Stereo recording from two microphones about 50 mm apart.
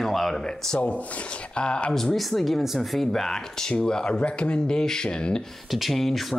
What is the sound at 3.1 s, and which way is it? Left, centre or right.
Speech, centre.